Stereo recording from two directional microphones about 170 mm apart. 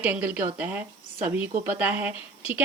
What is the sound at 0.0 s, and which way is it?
A woman's voice, 10° right (ahead or behind).